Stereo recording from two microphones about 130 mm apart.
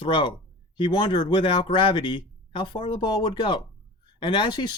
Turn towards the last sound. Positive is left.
turn(degrees=35)  # may be behind; listen again after turning